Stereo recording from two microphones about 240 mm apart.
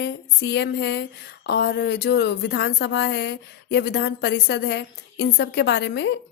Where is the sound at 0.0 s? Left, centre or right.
Left.